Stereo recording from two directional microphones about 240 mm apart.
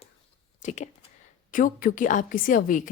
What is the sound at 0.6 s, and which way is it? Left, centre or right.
A woman's voice, left.